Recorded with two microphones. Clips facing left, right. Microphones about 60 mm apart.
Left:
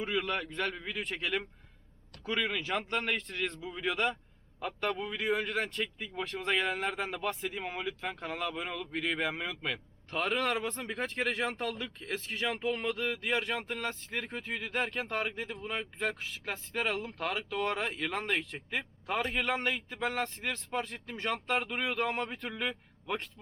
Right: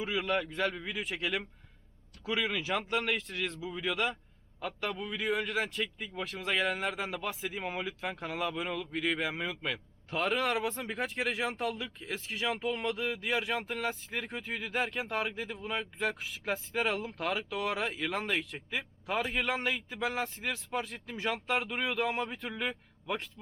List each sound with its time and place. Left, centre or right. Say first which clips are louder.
0.0 s a man's voice: right 1 dB; centre